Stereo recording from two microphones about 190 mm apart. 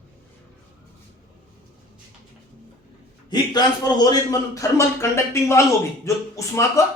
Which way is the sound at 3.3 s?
20° left (ahead or behind).